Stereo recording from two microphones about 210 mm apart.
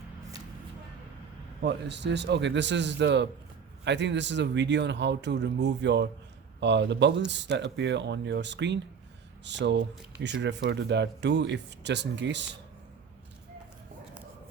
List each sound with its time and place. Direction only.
1.6 s speech: 55° right (ahead or behind)